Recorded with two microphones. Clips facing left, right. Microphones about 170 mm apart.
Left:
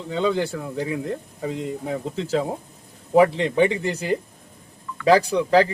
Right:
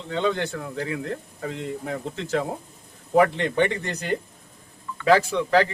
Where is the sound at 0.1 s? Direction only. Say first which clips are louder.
Left 2 dB; 10° left (ahead or behind).